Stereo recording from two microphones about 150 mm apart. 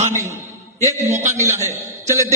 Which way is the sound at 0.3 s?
55° right (ahead or behind).